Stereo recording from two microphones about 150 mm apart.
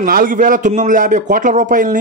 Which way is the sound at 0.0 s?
70° right (ahead or behind).